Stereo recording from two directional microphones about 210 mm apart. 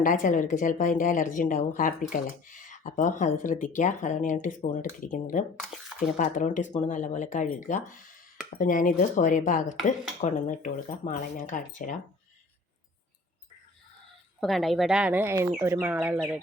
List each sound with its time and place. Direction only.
0.0 s speech: 40° left (ahead or behind)
14.4 s speech: centre (ahead or behind)